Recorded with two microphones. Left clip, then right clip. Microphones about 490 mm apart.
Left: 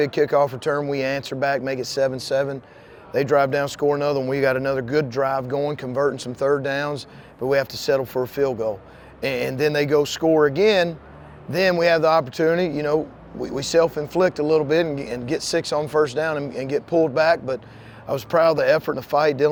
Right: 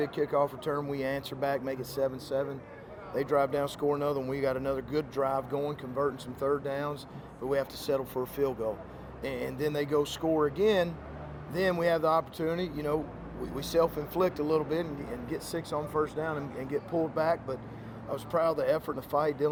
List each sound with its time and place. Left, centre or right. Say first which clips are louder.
0.0 s speech: left 10 dB; left